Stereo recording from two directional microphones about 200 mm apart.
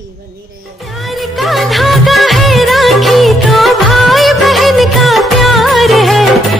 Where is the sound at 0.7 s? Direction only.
Centre (ahead or behind).